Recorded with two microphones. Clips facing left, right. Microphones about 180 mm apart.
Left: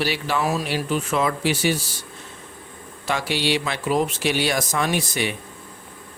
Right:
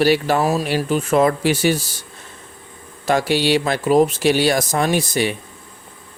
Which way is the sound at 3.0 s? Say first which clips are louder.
Right 7 dB; 40° right (ahead or behind).